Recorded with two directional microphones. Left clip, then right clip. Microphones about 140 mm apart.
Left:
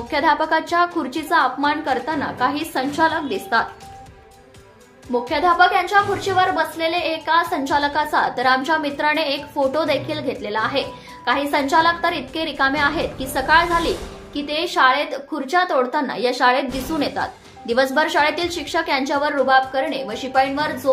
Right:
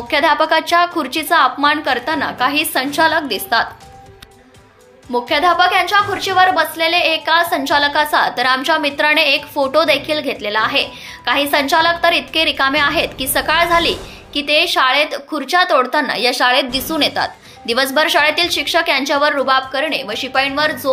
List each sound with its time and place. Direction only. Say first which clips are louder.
0.1 s a woman's voice: right 4 dB; 15° right (ahead or behind)
5.1 s a woman's voice: right 4 dB; 15° right (ahead or behind)